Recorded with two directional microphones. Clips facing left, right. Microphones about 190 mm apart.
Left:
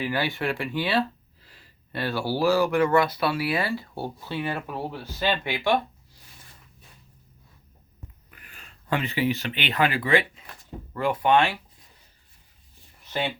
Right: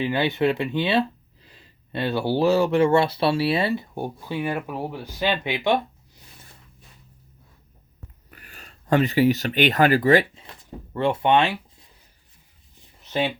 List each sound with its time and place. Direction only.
0.0 s speech: 20° right (ahead or behind)
8.3 s speech: 40° right (ahead or behind)
10.9 s speech: 25° right (ahead or behind)
13.1 s speech: 20° right (ahead or behind)